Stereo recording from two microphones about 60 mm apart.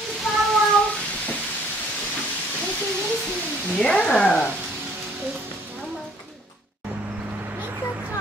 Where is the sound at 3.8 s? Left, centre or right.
Centre.